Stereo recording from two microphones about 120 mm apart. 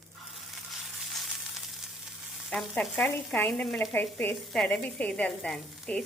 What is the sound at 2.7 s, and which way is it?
Speech, 15° left (ahead or behind).